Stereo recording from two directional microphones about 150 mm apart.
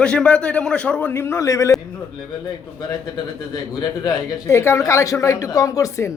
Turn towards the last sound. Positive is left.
turn(degrees=20)  # may be behind; listen again after turning